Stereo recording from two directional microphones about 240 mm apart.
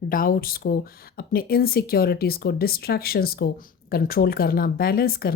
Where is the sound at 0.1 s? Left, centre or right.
Left.